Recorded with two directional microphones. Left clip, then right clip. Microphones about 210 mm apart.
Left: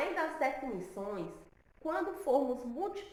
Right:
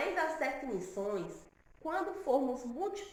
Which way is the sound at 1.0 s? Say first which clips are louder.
Right 3 dB; centre (ahead or behind).